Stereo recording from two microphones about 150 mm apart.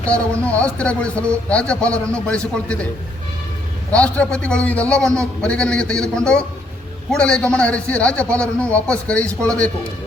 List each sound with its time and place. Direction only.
0.0 s a man's voice: 10° left (ahead or behind)
3.9 s a man's voice: 10° left (ahead or behind)